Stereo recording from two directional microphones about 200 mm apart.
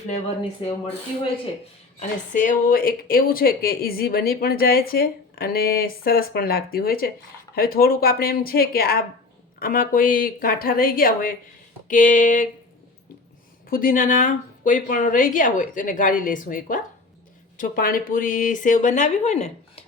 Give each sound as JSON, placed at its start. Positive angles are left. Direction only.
{"t": 2.0, "sound": "a woman's voice", "side_deg": 40}
{"t": 13.7, "sound": "a woman's voice", "side_deg": 45}